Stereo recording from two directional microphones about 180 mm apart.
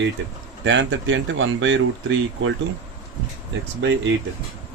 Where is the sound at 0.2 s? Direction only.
85° right.